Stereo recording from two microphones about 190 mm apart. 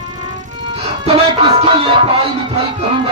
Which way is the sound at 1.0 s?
30° right (ahead or behind).